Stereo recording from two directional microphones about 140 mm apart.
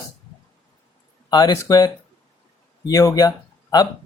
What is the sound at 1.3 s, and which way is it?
Speech, 25° left (ahead or behind).